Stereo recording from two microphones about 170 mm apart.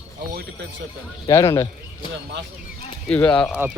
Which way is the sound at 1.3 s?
15° left (ahead or behind).